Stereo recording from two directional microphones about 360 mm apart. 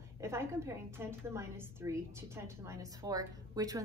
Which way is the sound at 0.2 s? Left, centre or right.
Centre.